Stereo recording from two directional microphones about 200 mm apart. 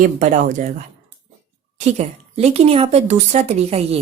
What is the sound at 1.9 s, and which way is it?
Speech, 35° right (ahead or behind).